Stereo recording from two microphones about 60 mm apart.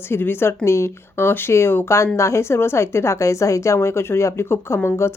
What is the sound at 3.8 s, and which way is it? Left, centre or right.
Speech, left.